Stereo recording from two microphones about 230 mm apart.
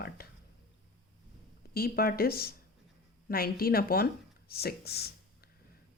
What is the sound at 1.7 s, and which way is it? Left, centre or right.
Speech, left.